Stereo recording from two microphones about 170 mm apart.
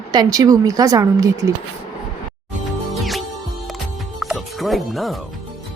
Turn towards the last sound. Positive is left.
turn(degrees=0)  # may be behind; listen again after turning